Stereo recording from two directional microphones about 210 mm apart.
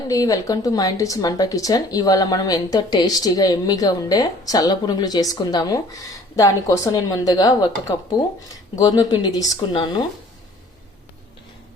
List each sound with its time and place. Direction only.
0.1 s speech: 15° left (ahead or behind)